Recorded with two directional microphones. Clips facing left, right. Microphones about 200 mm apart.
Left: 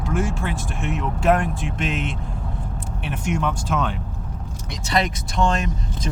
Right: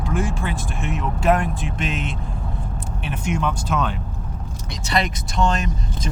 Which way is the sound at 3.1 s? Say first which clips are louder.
Even; 50° left (ahead or behind).